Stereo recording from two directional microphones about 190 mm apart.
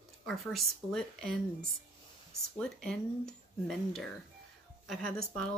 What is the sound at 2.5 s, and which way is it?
Speech, 5° left (ahead or behind).